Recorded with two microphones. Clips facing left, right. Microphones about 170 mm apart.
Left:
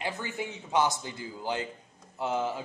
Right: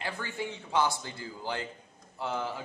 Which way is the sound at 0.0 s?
20° left (ahead or behind).